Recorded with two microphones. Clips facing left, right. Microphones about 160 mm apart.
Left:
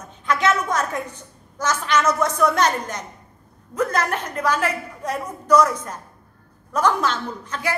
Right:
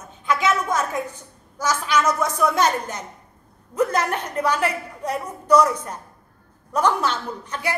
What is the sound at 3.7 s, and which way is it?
A woman's voice, 15° right (ahead or behind).